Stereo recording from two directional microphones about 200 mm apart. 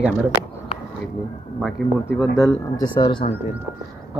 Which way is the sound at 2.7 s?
20° left (ahead or behind).